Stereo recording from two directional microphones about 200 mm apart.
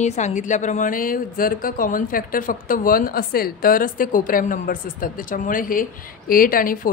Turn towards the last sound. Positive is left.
turn(degrees=45)  # may be behind; listen again after turning